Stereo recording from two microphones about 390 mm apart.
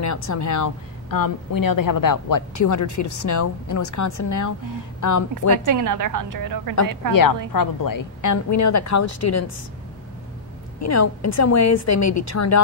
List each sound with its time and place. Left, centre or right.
0.0 s a woman's voice: left
5.7 s a woman's voice: right
7.5 s a woman's voice: left
10.8 s a woman's voice: left